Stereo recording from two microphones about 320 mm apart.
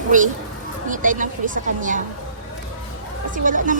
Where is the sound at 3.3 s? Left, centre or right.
Right.